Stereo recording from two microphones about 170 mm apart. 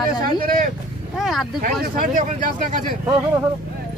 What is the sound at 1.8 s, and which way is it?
Speech, 50° right (ahead or behind).